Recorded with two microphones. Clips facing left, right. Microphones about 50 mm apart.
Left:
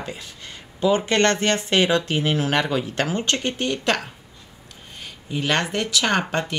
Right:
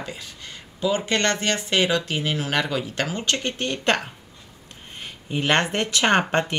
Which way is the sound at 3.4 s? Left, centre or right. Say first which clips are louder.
Left 2 dB; centre.